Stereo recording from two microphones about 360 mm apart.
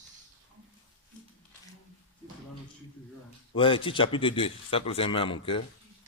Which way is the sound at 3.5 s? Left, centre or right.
Centre.